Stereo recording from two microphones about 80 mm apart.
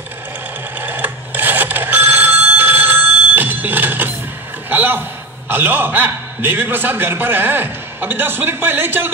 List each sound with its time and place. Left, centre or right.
0.7 s telephone: right
4.6 s a man's voice: right